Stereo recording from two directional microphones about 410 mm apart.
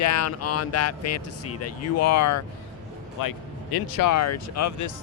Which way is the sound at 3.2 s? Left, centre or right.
Left.